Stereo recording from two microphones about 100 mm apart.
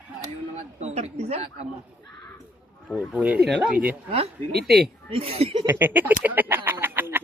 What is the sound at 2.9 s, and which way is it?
Speech, 10° right (ahead or behind).